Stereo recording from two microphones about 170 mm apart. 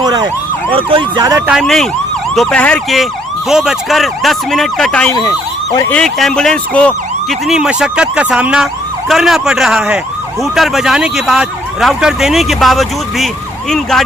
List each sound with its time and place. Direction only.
0.0 s emergency vehicle: 25° right (ahead or behind)
1.5 s speech: centre (ahead or behind)
5.7 s speech: 15° left (ahead or behind)
6.0 s speech: 5° left (ahead or behind)